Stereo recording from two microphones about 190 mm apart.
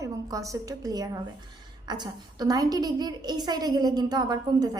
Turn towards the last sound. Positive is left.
turn(degrees=-20)  # may be behind; listen again after turning